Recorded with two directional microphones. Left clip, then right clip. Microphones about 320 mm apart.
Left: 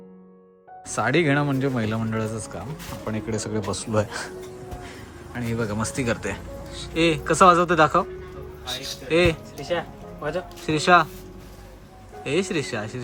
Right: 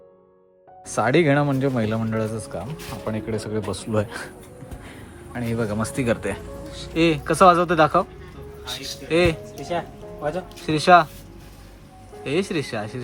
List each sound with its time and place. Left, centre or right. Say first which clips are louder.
0.9 s speech: right 3 dB; centre
8.6 s speech: even; left
9.0 s speech: even; centre
10.7 s speech: right 3 dB; centre
12.2 s speech: even; centre